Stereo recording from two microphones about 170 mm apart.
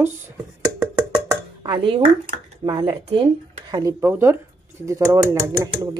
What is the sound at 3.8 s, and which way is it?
A woman's voice, 15° right (ahead or behind).